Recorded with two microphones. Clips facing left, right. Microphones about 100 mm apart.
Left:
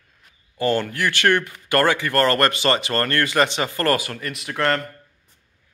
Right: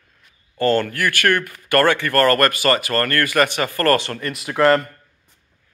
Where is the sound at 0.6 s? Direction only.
15° left (ahead or behind); by 4.9 s 5° right (ahead or behind).